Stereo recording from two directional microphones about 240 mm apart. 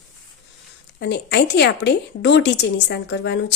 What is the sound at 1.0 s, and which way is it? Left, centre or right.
Speech, left.